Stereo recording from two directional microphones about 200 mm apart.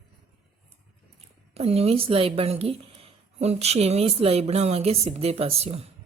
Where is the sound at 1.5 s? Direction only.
30° right (ahead or behind).